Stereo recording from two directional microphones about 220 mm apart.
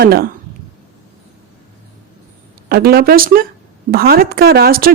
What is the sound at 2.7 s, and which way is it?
A woman's voice, 45° right (ahead or behind).